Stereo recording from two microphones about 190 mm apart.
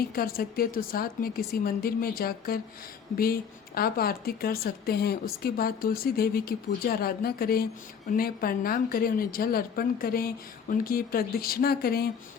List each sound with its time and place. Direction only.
0.1 s a woman's voice: 50° left (ahead or behind)
3.8 s a woman's voice: 50° left (ahead or behind)